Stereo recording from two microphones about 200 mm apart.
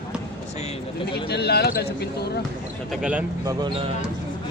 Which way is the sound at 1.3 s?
55° left (ahead or behind).